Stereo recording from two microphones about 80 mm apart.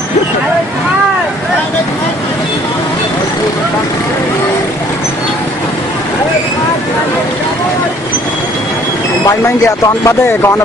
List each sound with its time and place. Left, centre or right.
10.0 s speech: left